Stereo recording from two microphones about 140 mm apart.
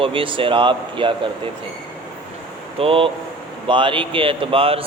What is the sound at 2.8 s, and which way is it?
Speech, 40° right (ahead or behind).